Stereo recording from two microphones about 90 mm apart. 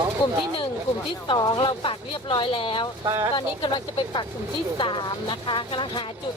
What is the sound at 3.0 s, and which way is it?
Speech, 40° right (ahead or behind).